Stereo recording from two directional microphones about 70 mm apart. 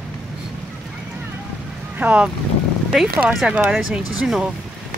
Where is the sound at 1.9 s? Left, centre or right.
Centre.